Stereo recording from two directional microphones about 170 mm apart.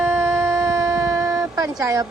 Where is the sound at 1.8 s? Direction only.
20° right (ahead or behind).